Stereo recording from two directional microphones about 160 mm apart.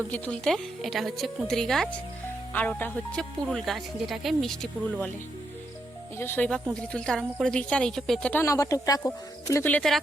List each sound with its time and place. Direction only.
0.1 s speech: 5° left (ahead or behind)
6.1 s speech: 15° left (ahead or behind)
8.3 s speech: 15° left (ahead or behind)